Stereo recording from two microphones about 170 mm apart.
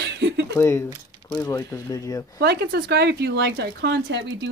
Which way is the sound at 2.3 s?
70° right (ahead or behind).